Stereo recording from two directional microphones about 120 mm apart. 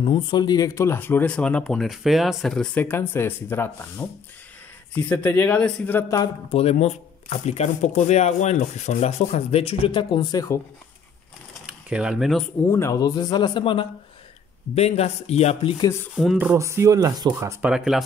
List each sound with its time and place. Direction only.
0.0 s speech: 45° left (ahead or behind); by 6.0 s 15° left (ahead or behind)
6.0 s a man's voice: 30° left (ahead or behind)
6.5 s speech: 60° left (ahead or behind); by 10.4 s 40° left (ahead or behind)
11.6 s speech: 5° right (ahead or behind)
12.7 s a man's voice: 25° left (ahead or behind); by 13.8 s 45° left (ahead or behind)
14.8 s speech: 60° left (ahead or behind)
16.5 s speech: 25° right (ahead or behind)
17.6 s speech: 5° right (ahead or behind)